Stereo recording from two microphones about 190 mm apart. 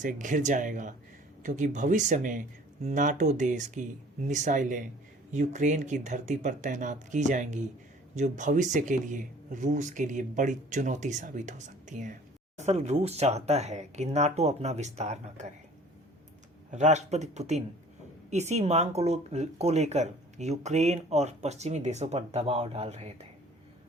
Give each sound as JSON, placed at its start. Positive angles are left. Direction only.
{"t": 0.0, "sound": "speech", "side_deg": -40}
{"t": 16.7, "sound": "speech", "side_deg": -35}